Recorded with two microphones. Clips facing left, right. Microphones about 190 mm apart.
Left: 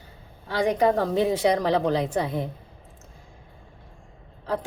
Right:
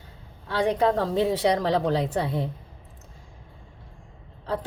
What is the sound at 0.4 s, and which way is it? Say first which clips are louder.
A woman's voice: left 1 dB; 15° left (ahead or behind).